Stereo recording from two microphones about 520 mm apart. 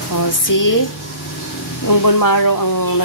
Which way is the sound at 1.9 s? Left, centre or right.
Left.